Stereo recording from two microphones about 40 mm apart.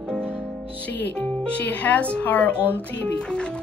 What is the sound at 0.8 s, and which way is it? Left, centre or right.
Speech, left.